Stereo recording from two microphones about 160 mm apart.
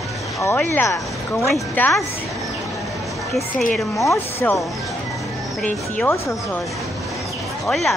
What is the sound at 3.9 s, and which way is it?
Speech, 15° left (ahead or behind).